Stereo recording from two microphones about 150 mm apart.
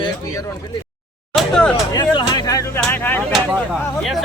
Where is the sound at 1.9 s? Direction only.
25° left (ahead or behind).